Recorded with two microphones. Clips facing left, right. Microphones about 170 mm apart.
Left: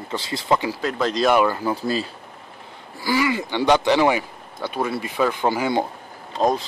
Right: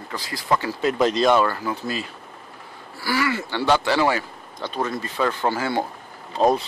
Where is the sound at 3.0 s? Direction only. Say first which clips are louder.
Left 2 dB; 15° left (ahead or behind).